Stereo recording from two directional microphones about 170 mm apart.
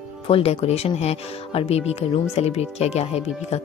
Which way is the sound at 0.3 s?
35° left (ahead or behind).